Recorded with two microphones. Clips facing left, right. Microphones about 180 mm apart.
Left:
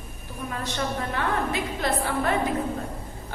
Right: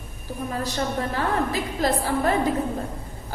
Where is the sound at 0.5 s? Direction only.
35° right (ahead or behind).